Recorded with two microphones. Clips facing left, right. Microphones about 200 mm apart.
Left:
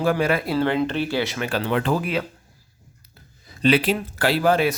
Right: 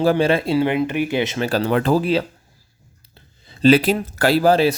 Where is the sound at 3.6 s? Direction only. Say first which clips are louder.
Right 5 dB; 40° right (ahead or behind).